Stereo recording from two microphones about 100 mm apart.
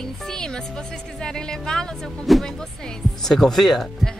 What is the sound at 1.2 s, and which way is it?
Speech, 5° left (ahead or behind).